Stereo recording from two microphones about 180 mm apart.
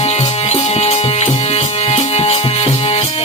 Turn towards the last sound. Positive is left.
turn(degrees=35)  # may be behind; listen again after turning